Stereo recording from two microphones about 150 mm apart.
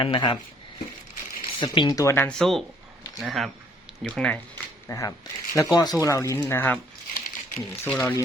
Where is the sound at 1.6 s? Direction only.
30° left (ahead or behind); by 4.3 s 5° left (ahead or behind).